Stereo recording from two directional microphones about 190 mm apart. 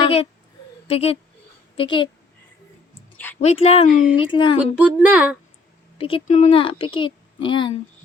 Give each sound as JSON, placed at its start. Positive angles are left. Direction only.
{"t": 0.0, "sound": "a sound", "side_deg": 30}
{"t": 0.9, "sound": "a woman's voice", "side_deg": 30}
{"t": 3.3, "sound": "a woman's voice", "side_deg": 35}
{"t": 4.7, "sound": "speech", "side_deg": -5}
{"t": 6.0, "sound": "a woman's voice", "side_deg": 30}